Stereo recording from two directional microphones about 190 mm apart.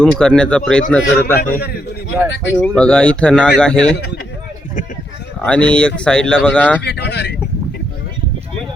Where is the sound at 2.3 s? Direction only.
70° left (ahead or behind).